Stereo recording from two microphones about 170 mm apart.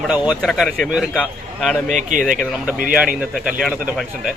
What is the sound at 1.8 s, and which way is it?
Speech, 50° right (ahead or behind).